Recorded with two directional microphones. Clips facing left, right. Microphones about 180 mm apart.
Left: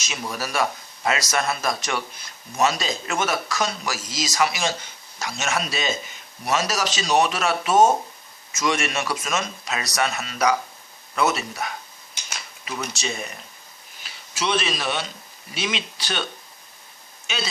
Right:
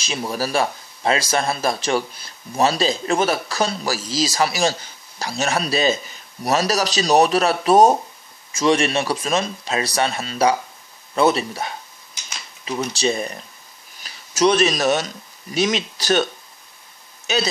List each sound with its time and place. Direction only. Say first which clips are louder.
0.0 s speech: right 6 dB; 30° right (ahead or behind)
17.3 s speech: right 9 dB; 40° right (ahead or behind)